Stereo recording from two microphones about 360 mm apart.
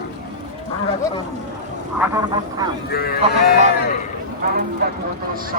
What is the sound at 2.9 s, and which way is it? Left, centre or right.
Speech, left.